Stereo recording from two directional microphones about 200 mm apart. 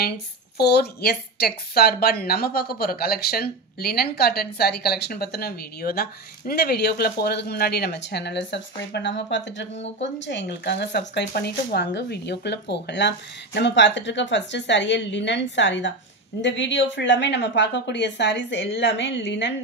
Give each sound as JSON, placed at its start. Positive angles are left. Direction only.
{"t": 0.6, "sound": "a woman's voice", "side_deg": 55}